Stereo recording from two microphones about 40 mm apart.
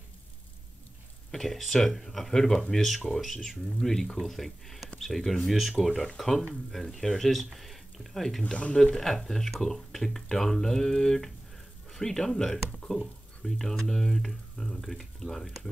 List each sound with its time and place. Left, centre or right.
1.3 s speech: centre
3.8 s speech: centre